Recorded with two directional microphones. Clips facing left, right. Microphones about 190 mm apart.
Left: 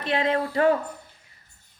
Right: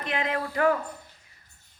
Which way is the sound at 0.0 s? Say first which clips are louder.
Left 5 dB; 30° left (ahead or behind).